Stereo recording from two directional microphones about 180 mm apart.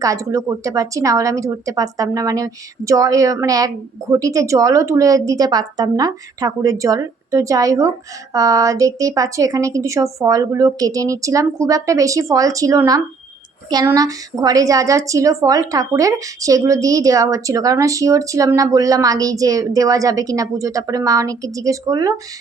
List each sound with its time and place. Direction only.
0.0 s a woman's voice: 20° right (ahead or behind)